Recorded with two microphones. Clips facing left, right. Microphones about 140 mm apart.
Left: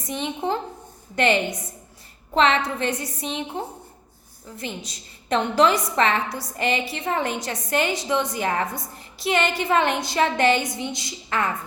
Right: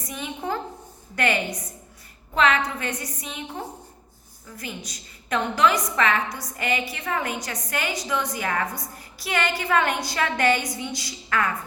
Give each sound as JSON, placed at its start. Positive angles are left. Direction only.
{"t": 0.0, "sound": "a woman's voice", "side_deg": 25}
{"t": 4.5, "sound": "a woman's voice", "side_deg": 25}